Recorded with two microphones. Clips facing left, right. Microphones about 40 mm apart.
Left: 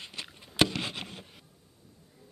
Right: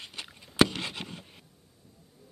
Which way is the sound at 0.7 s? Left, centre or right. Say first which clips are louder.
Left 1 dB; left.